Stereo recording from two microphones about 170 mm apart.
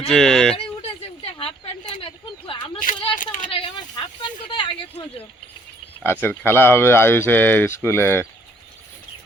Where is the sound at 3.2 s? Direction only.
50° left (ahead or behind).